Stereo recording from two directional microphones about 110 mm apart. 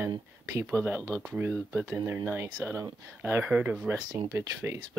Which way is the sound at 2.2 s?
20° right (ahead or behind).